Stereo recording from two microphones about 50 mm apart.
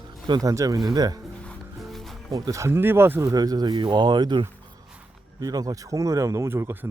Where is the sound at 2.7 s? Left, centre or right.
Right.